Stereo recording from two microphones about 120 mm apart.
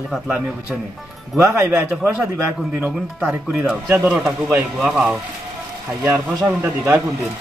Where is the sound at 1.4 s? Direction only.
25° right (ahead or behind).